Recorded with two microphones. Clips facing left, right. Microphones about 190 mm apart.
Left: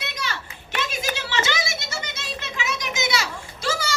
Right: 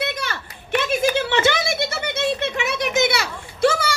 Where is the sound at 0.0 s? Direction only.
55° right (ahead or behind).